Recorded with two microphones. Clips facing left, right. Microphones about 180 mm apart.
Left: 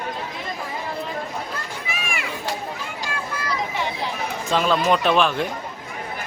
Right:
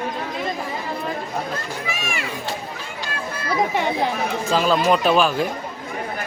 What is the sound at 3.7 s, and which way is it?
Speech, 55° right (ahead or behind).